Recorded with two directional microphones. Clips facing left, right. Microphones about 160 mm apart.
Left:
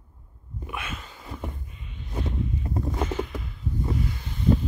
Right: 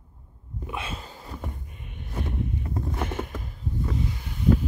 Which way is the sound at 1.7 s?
55° right (ahead or behind).